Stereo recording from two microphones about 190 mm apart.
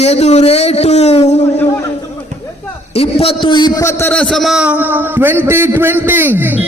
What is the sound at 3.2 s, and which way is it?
A man's voice, 25° left (ahead or behind).